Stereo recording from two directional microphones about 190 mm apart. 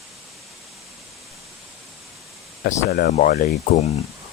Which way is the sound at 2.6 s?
55° left (ahead or behind).